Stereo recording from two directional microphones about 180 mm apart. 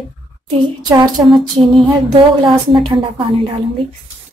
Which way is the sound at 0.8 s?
20° right (ahead or behind).